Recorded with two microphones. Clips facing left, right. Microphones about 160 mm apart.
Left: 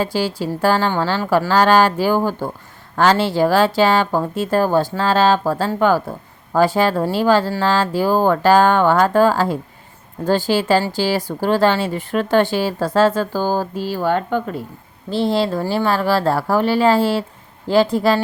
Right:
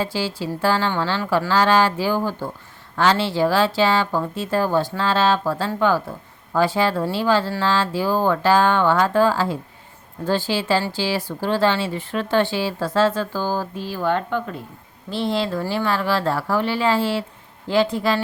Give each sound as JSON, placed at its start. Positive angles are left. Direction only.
{"t": 0.0, "sound": "speech", "side_deg": 45}
{"t": 15.1, "sound": "speech", "side_deg": 35}